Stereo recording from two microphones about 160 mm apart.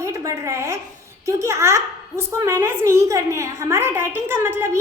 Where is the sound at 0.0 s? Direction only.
20° right (ahead or behind).